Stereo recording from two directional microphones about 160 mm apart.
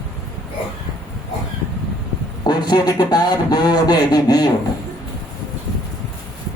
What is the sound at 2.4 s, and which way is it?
A man's voice, 25° left (ahead or behind).